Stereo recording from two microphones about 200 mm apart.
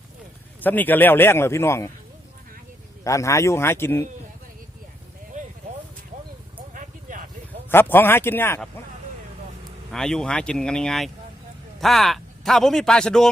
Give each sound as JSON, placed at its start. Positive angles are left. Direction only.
{"t": 0.6, "sound": "a man's voice", "side_deg": 10}
{"t": 3.0, "sound": "a man's voice", "side_deg": 15}
{"t": 6.7, "sound": "vehicle", "side_deg": -40}
{"t": 7.7, "sound": "a man's voice", "side_deg": 10}
{"t": 9.9, "sound": "a man's voice", "side_deg": 5}